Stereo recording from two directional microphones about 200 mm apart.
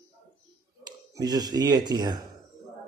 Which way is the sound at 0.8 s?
20° right (ahead or behind).